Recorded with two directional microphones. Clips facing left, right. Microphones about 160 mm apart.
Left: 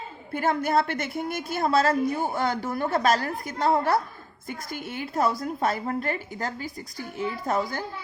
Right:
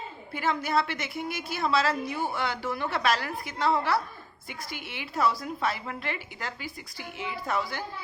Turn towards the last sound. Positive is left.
turn(degrees=45)  # may be behind; listen again after turning